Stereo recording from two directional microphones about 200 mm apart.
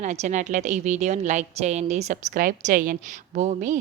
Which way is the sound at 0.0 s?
35° right (ahead or behind).